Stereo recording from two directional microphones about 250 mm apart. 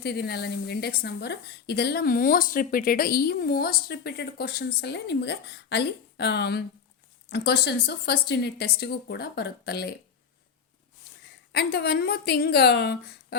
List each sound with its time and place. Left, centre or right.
0.0 s a woman's voice: left
11.5 s a woman's voice: left